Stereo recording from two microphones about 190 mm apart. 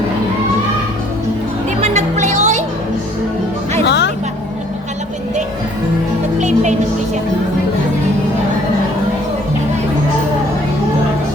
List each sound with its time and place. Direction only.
1.8 s music: 40° right (ahead or behind)
3.8 s music: 65° left (ahead or behind)
6.4 s music: 40° right (ahead or behind)